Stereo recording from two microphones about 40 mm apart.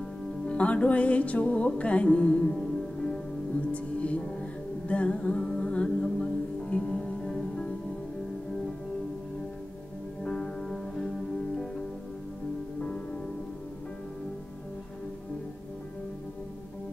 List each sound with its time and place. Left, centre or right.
0.5 s music: left
3.7 s music: left
7.0 s music: centre
10.3 s music: centre
12.8 s music: left